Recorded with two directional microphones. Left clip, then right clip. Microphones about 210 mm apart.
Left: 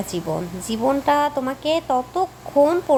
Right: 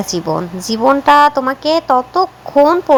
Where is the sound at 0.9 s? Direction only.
15° right (ahead or behind).